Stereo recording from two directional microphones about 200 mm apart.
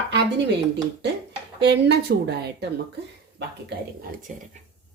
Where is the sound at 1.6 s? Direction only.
60° right (ahead or behind).